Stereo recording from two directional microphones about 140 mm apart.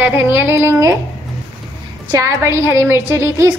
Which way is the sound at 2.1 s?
25° right (ahead or behind).